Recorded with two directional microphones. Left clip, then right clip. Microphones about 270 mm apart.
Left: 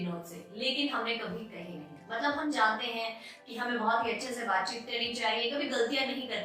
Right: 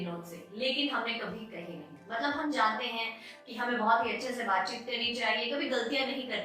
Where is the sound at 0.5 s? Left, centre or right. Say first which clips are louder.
Right 1 dB; centre.